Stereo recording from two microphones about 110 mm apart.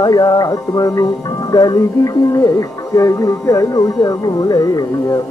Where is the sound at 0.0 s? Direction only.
35° left (ahead or behind).